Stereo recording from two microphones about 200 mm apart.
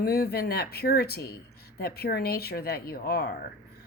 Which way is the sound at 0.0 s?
50° left (ahead or behind).